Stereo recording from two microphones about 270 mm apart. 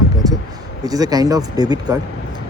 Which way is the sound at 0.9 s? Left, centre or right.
Centre.